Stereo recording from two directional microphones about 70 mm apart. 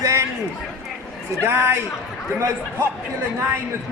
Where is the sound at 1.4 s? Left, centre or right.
Right.